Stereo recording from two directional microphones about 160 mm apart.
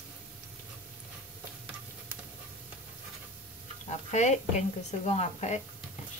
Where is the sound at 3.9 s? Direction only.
45° left (ahead or behind).